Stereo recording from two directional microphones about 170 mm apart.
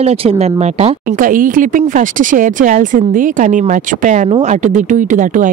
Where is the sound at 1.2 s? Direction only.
55° right (ahead or behind).